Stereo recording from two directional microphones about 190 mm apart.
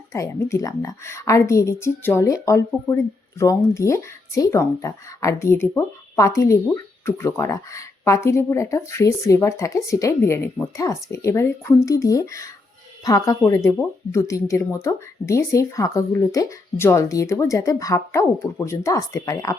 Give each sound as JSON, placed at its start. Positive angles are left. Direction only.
{"t": 0.1, "sound": "a woman's voice", "side_deg": 15}